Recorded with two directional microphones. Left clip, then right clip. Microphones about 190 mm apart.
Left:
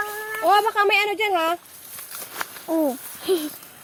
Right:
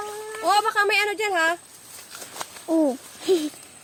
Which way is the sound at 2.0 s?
50° left (ahead or behind).